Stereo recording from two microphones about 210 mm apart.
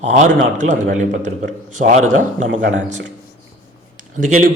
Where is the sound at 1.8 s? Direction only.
55° right (ahead or behind).